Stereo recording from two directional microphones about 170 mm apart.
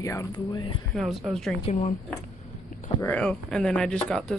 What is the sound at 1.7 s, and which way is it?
Speech, 40° left (ahead or behind).